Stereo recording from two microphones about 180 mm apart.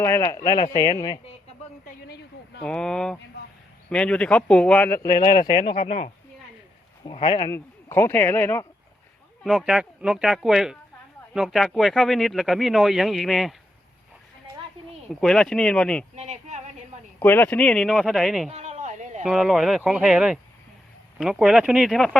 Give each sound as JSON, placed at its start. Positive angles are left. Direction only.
{"t": 0.0, "sound": "speech", "side_deg": 15}
{"t": 1.8, "sound": "speech", "side_deg": 55}
{"t": 2.6, "sound": "speech", "side_deg": 5}
{"t": 5.7, "sound": "speech", "side_deg": 45}
{"t": 7.0, "sound": "speech", "side_deg": 30}
{"t": 7.5, "sound": "a man's voice", "side_deg": 15}
{"t": 9.4, "sound": "speech", "side_deg": 0}
{"t": 15.1, "sound": "speech", "side_deg": 5}
{"t": 16.1, "sound": "speech", "side_deg": -40}
{"t": 17.2, "sound": "speech", "side_deg": 10}
{"t": 18.4, "sound": "a sound", "side_deg": -40}
{"t": 19.2, "sound": "speech", "side_deg": 0}